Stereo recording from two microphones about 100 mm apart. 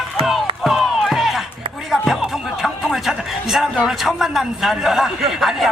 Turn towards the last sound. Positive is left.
turn(degrees=0)  # may be behind; listen again after turning